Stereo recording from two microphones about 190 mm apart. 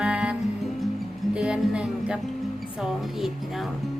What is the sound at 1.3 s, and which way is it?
Music, 5° right (ahead or behind).